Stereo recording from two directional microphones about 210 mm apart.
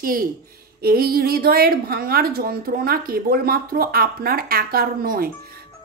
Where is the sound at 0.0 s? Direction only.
40° right (ahead or behind).